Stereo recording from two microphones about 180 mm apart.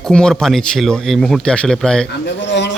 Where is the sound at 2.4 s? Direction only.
80° left.